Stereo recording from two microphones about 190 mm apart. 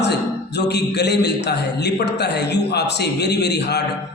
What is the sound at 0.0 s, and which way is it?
A man's voice, 60° left (ahead or behind).